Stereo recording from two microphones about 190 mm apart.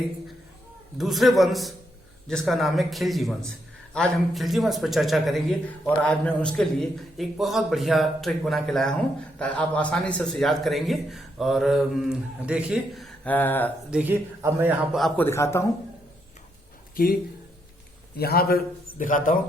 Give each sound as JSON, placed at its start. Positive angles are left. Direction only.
{"t": 0.9, "sound": "a man's voice", "side_deg": 0}
{"t": 13.9, "sound": "a man's voice", "side_deg": -10}
{"t": 16.9, "sound": "speech", "side_deg": 50}
{"t": 18.2, "sound": "a man's voice", "side_deg": 55}